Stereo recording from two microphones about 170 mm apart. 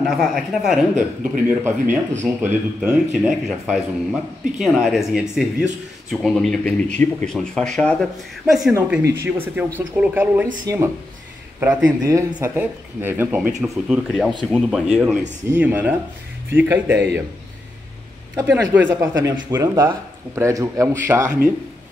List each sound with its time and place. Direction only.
0.0 s speech: centre (ahead or behind)
1.5 s speech: 10° right (ahead or behind)
8.7 s speech: 15° right (ahead or behind)
11.6 s speech: 10° right (ahead or behind)
12.0 s speech: 20° right (ahead or behind)
18.3 s speech: 15° right (ahead or behind)